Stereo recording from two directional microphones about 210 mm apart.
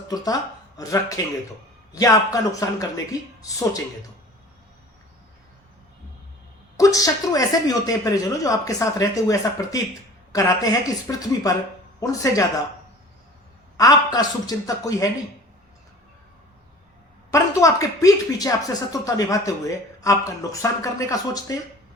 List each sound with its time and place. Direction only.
0.8 s speech: 15° left (ahead or behind)
6.7 s speech: 15° left (ahead or behind)
13.7 s speech: 15° left (ahead or behind)
17.3 s speech: 15° left (ahead or behind)